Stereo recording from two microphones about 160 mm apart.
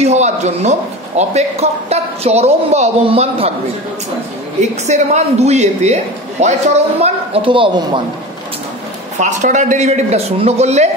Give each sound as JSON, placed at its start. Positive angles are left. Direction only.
{"t": 0.0, "sound": "speech", "side_deg": -45}
{"t": 4.6, "sound": "a man's voice", "side_deg": -45}
{"t": 7.0, "sound": "speech", "side_deg": -35}
{"t": 9.2, "sound": "a man's voice", "side_deg": -50}